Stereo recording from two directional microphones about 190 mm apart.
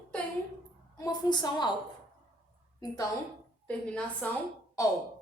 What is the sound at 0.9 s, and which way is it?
Speech, 20° left (ahead or behind).